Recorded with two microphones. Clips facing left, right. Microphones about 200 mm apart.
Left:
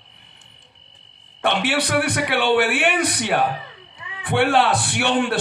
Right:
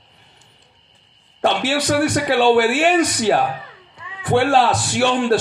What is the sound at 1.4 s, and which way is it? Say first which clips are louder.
A man's voice: right 2 dB; 60° left (ahead or behind).